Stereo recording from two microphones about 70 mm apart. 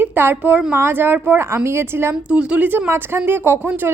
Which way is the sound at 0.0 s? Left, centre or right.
Right.